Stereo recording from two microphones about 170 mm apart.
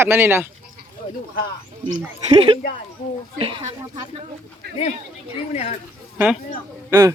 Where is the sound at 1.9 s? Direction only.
35° right (ahead or behind).